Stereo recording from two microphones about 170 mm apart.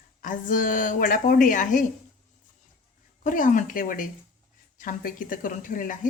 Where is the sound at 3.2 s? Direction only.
50° left (ahead or behind).